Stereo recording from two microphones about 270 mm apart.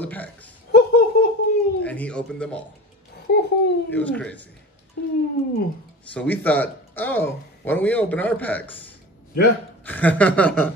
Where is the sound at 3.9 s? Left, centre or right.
Centre.